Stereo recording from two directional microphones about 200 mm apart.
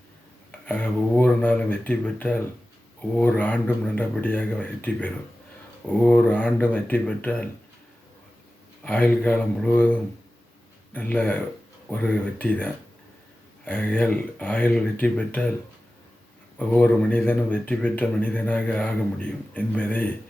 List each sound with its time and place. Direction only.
0.6 s speech: 5° left (ahead or behind)
8.8 s speech: 5° left (ahead or behind)
16.6 s speech: 5° left (ahead or behind)